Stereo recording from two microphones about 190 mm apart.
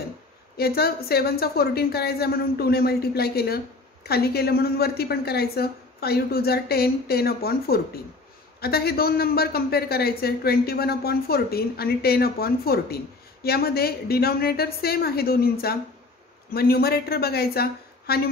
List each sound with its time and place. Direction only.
0.6 s a woman's voice: 55° left (ahead or behind)